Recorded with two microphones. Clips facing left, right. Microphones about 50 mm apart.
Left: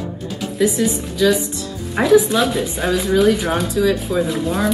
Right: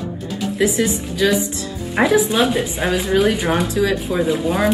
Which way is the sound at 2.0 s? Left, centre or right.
Centre.